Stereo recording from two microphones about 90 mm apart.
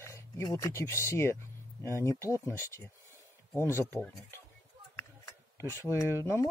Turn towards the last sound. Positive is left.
turn(degrees=30)  # may be behind; listen again after turning